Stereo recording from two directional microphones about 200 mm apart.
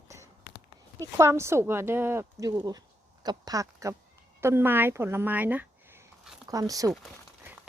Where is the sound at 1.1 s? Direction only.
15° right (ahead or behind).